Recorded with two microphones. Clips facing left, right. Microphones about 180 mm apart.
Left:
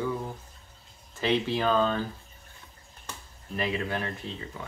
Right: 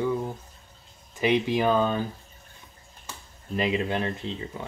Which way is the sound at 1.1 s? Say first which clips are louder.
Right 3 dB; 15° right (ahead or behind).